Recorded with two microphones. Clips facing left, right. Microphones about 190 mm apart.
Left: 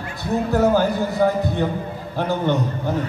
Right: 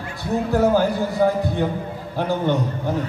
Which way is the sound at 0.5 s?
10° right (ahead or behind).